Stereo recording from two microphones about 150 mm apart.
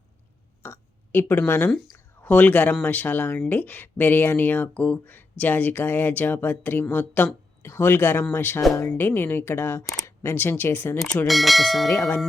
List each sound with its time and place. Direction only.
0.6 s a sound: 15° left (ahead or behind)
2.2 s speech: 10° left (ahead or behind)
11.0 s speech: 5° left (ahead or behind)
11.9 s speech: 15° left (ahead or behind)